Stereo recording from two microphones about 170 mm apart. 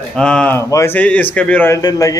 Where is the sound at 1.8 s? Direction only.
20° left (ahead or behind).